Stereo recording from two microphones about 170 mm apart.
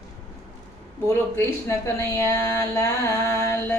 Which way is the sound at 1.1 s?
15° left (ahead or behind).